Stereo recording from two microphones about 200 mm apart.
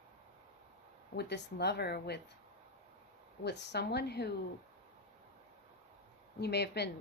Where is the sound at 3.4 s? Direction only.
55° left (ahead or behind).